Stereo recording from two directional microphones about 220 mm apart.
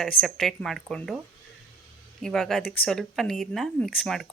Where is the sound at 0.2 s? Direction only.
Centre (ahead or behind).